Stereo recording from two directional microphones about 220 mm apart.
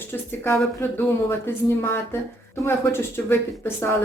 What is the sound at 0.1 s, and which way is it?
Speech, 10° left (ahead or behind).